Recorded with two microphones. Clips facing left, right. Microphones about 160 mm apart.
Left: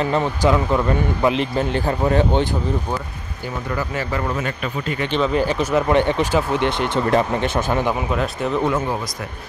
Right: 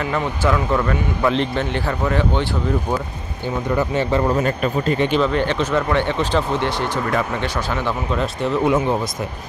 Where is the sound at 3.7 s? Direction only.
25° right (ahead or behind).